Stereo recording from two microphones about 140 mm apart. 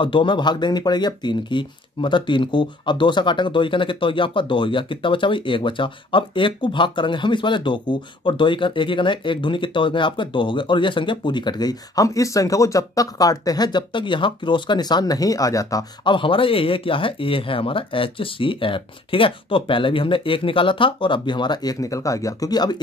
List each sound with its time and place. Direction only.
0.0 s speech: 35° left (ahead or behind)